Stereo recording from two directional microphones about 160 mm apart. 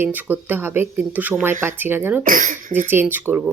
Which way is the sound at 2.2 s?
55° right (ahead or behind).